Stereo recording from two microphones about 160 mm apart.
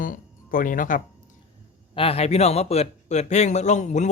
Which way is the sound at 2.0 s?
40° left (ahead or behind).